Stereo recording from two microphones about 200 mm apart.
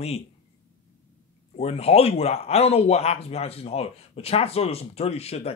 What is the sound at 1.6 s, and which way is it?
A man's voice, 30° left (ahead or behind).